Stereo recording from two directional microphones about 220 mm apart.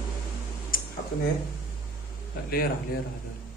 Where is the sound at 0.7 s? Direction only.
40° left (ahead or behind).